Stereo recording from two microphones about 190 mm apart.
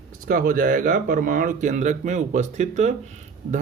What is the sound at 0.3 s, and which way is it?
Speech, 45° right (ahead or behind).